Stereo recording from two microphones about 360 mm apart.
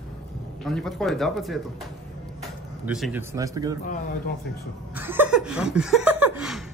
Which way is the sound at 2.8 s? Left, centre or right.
Centre.